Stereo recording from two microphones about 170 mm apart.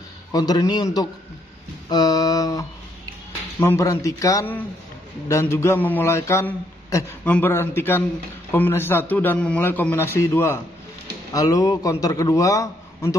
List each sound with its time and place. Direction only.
0.3 s a man's voice: 25° left (ahead or behind)
1.9 s a sound: 25° left (ahead or behind)
3.5 s a man's voice: 15° left (ahead or behind)